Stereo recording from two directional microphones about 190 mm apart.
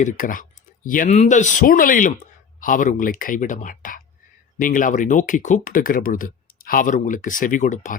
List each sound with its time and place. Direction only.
0.0 s speech: 45° left (ahead or behind)